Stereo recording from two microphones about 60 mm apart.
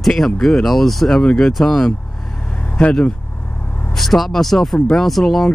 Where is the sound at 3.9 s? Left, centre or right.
Centre.